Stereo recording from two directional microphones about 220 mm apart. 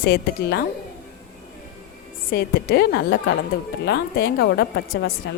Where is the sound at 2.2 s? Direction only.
45° left (ahead or behind).